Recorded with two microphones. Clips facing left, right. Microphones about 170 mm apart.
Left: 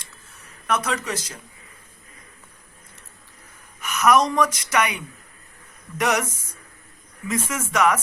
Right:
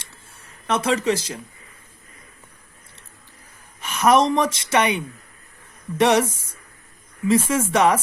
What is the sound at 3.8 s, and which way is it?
Speech, 30° right (ahead or behind).